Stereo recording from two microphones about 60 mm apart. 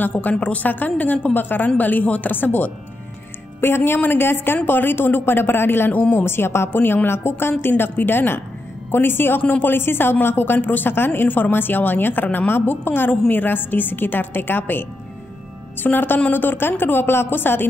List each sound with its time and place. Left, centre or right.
0.0 s a woman's voice: left
6.2 s speech: left